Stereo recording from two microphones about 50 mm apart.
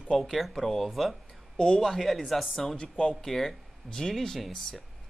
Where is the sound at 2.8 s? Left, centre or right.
Centre.